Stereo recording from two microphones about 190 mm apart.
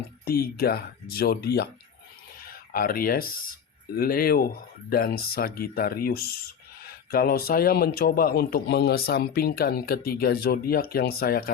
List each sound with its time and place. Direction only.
0.3 s speech: 55° left (ahead or behind)